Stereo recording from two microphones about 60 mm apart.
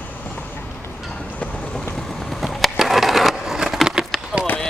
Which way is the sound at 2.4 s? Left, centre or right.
Centre.